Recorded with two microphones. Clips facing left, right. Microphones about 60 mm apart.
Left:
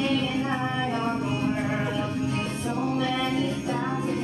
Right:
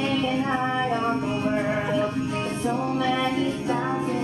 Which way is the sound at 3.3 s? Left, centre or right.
Centre.